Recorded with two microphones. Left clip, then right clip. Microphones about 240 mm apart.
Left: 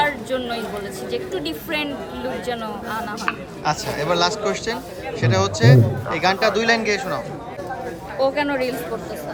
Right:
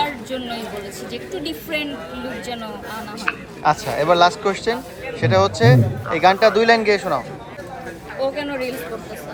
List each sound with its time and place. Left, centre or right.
0.3 s a man's voice: centre
3.3 s speech: left
3.6 s a man's voice: centre
8.4 s speech: left